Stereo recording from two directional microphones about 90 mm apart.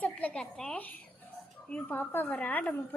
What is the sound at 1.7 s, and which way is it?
A woman's voice, 20° left (ahead or behind).